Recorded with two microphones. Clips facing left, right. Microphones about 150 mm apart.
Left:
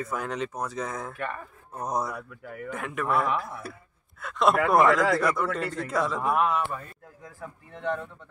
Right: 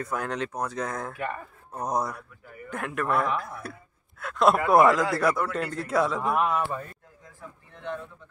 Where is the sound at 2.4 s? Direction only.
75° left (ahead or behind).